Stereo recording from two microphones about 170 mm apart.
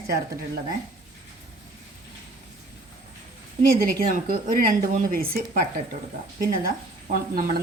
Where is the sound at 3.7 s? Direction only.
55° right (ahead or behind).